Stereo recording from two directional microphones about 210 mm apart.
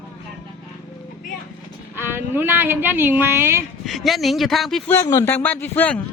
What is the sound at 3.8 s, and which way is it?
A man's voice, centre (ahead or behind).